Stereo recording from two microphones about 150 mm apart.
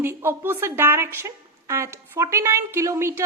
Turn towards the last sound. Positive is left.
turn(degrees=-20)  # may be behind; listen again after turning